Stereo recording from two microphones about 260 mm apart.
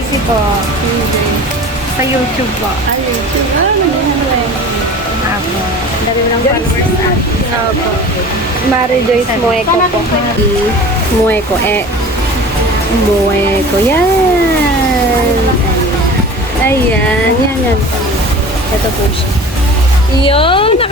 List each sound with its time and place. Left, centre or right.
20.2 s speech: centre